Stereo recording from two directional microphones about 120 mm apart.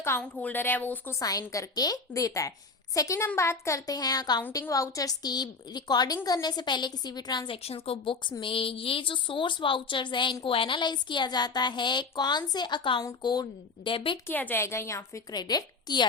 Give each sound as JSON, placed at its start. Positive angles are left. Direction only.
{"t": 0.2, "sound": "a woman's voice", "side_deg": 15}
{"t": 1.2, "sound": "a woman's voice", "side_deg": 30}
{"t": 13.9, "sound": "a woman's voice", "side_deg": 50}
{"t": 14.3, "sound": "a woman's voice", "side_deg": 15}